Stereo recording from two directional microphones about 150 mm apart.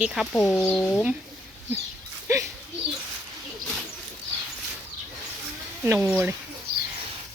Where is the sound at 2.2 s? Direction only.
20° right (ahead or behind).